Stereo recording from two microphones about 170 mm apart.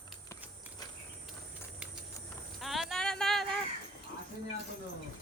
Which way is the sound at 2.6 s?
Centre (ahead or behind).